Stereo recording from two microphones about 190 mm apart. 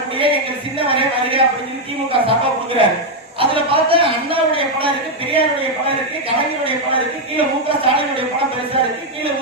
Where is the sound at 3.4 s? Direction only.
30° right (ahead or behind).